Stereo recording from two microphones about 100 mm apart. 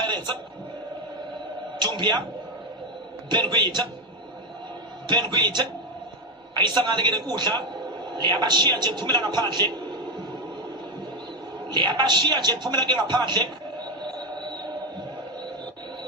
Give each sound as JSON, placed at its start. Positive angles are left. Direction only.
{"t": 0.0, "sound": "a sound", "side_deg": -50}
{"t": 1.8, "sound": "a man's voice", "side_deg": -50}
{"t": 3.2, "sound": "a man's voice", "side_deg": -50}
{"t": 5.0, "sound": "a man's voice", "side_deg": -50}
{"t": 11.7, "sound": "a man's voice", "side_deg": -50}